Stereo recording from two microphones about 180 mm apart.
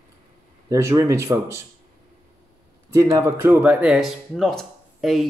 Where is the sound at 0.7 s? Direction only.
15° right (ahead or behind).